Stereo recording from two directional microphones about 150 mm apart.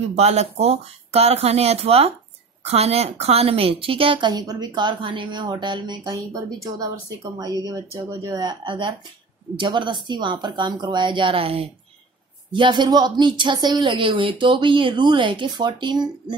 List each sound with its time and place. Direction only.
0.1 s a woman's voice: 45° right (ahead or behind); by 16.3 s 30° right (ahead or behind)